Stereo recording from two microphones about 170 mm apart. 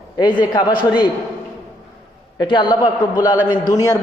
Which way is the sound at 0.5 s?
25° left (ahead or behind).